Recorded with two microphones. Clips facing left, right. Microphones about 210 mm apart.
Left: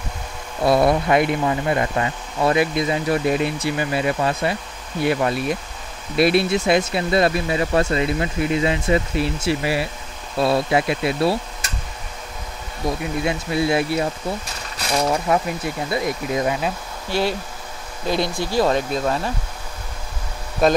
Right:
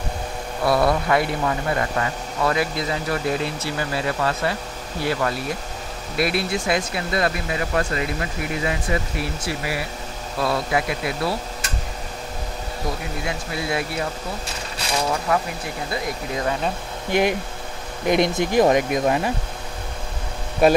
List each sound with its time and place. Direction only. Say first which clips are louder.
0.7 s speech: left 3 dB; 20° left (ahead or behind)
13.2 s speech: left 6 dB; 25° left (ahead or behind)
15.3 s speech: left 3 dB; 25° left (ahead or behind)
17.1 s speech: right 2 dB; 15° right (ahead or behind)
20.6 s speech: right 1 dB; 10° right (ahead or behind)